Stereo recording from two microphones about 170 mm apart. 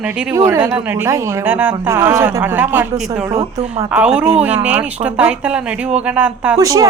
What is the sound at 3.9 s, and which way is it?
A woman's voice, 10° right (ahead or behind).